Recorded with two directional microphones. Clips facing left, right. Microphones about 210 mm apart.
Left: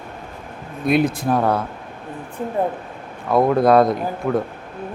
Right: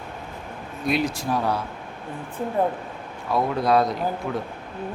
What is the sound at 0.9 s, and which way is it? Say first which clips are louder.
Speech: left 6 dB; 55° left (ahead or behind).